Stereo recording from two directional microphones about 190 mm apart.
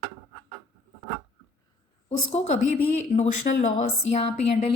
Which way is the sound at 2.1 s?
35° left (ahead or behind).